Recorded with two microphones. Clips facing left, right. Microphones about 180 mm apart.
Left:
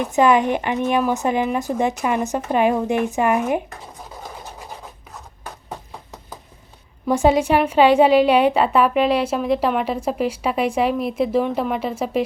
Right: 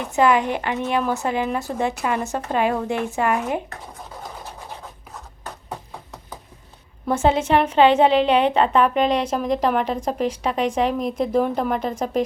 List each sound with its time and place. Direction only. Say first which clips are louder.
0.0 s a woman's voice: left 2 dB; 20° left (ahead or behind)
7.1 s a woman's voice: left 2 dB; 10° left (ahead or behind)